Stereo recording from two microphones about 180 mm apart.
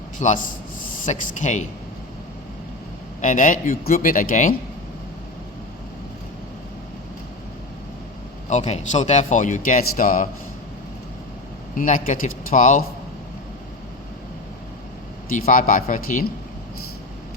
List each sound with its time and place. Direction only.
0.2 s speech: 45° left (ahead or behind)
3.2 s speech: 45° left (ahead or behind)
8.4 s speech: 40° left (ahead or behind)
11.8 s speech: 50° left (ahead or behind)
15.3 s speech: 50° left (ahead or behind)